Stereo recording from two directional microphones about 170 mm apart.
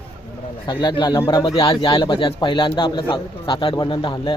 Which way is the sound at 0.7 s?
25° left (ahead or behind).